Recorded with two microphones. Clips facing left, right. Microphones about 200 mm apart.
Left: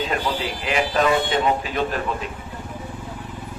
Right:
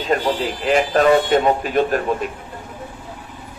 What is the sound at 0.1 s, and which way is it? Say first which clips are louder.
A man's voice: right 5 dB; 40° right (ahead or behind).